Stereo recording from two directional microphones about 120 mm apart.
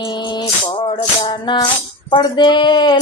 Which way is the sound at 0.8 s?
35° left (ahead or behind).